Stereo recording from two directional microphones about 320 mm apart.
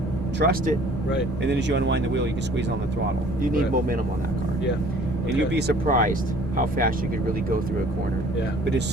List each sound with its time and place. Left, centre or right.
0.3 s speech: right
3.5 s speech: right
5.5 s speech: right